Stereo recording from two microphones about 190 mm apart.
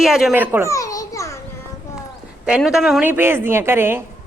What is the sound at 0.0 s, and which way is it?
Speech, centre (ahead or behind).